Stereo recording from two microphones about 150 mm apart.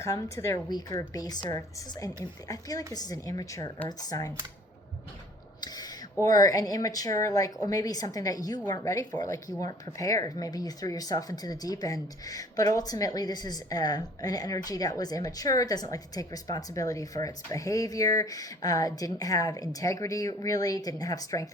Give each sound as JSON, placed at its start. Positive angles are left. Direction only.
{"t": 0.0, "sound": "speech", "side_deg": 20}
{"t": 5.5, "sound": "a sound", "side_deg": 25}
{"t": 6.2, "sound": "speech", "side_deg": 25}